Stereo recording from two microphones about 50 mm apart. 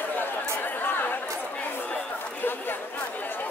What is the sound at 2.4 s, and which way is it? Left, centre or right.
Chatter, left.